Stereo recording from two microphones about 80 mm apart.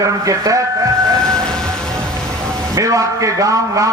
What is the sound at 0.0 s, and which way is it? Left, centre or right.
Speech, right.